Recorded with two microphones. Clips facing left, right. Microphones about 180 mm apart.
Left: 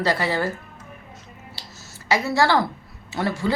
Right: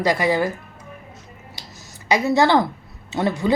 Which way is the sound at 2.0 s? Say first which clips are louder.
Right 3 dB; 20° right (ahead or behind).